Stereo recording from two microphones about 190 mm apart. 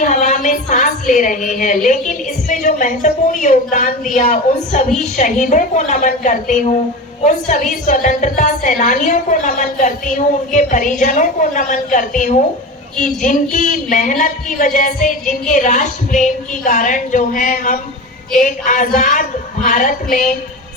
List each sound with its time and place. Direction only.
0.0 s speech: 40° left (ahead or behind)